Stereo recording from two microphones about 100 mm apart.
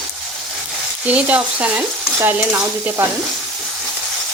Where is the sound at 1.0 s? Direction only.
15° right (ahead or behind).